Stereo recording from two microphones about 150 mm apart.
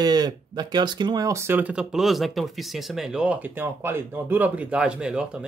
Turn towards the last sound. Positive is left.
turn(degrees=-5)  # may be behind; listen again after turning